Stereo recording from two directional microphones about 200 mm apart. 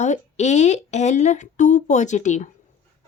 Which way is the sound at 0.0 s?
35° left (ahead or behind).